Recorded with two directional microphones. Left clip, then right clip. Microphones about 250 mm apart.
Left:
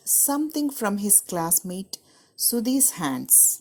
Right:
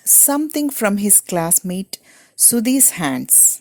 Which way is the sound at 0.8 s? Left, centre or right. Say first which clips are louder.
Right 8 dB; right.